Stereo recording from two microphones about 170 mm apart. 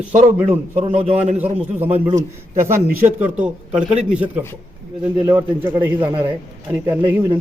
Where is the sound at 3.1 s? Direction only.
10° right (ahead or behind).